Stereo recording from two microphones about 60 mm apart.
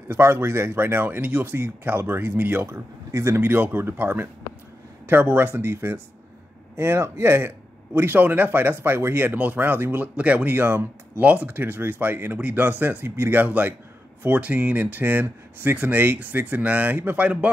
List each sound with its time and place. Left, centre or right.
0.1 s speech: right
2.6 s speech: right
10.1 s speech: right